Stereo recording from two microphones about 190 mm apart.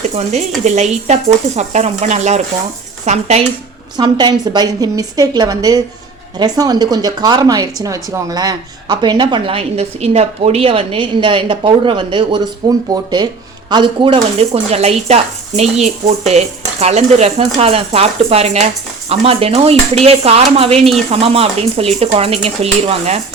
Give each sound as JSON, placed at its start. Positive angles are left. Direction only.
{"t": 0.2, "sound": "speech", "side_deg": -35}
{"t": 3.9, "sound": "speech", "side_deg": -20}